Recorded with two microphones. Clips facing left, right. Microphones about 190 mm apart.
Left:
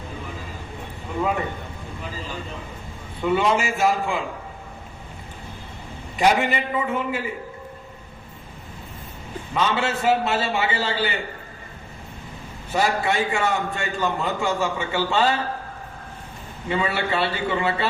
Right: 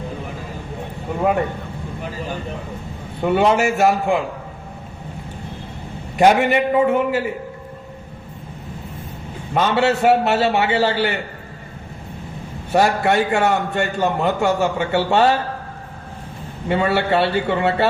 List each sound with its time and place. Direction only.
2.0 s vehicle: 60° right (ahead or behind)
3.2 s a man's voice: 60° right (ahead or behind)
6.1 s a man's voice: 60° right (ahead or behind)
9.6 s a man's voice: 65° right (ahead or behind)
12.7 s a man's voice: 65° right (ahead or behind)
16.6 s a man's voice: 60° right (ahead or behind)